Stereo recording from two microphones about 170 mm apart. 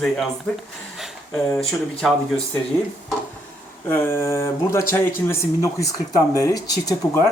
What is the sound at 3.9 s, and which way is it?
Speech, 15° left (ahead or behind).